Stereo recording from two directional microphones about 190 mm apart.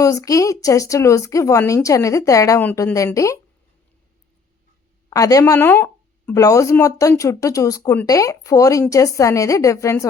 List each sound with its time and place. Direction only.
0.0 s speech: 15° left (ahead or behind)
5.0 s speech: 20° left (ahead or behind)